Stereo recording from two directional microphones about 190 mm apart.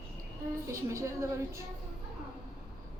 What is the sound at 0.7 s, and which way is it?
Speech, 15° right (ahead or behind).